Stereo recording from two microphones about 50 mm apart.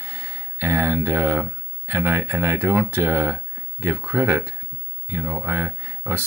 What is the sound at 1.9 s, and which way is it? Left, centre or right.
Speech, right.